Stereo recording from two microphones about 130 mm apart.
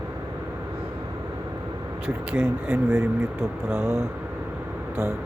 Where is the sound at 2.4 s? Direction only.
20° right (ahead or behind).